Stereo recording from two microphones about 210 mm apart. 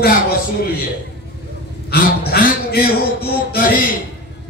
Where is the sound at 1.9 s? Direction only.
50° left (ahead or behind).